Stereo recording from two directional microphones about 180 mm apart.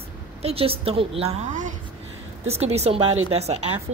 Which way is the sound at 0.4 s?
35° right (ahead or behind).